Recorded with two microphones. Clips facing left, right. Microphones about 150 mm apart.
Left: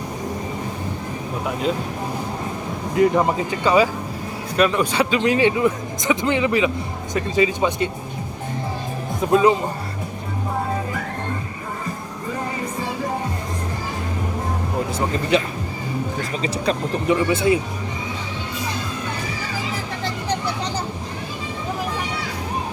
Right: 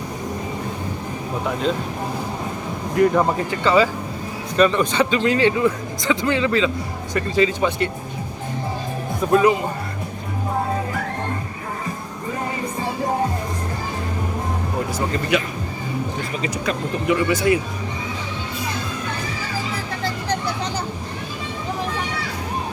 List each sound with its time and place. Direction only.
3.0 s a man's voice: 15° left (ahead or behind)
9.3 s speech: 25° left (ahead or behind)
14.9 s speech: 25° left (ahead or behind)
16.4 s speech: 30° left (ahead or behind)